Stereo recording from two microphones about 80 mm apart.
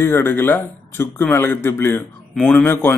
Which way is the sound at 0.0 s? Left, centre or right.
Left.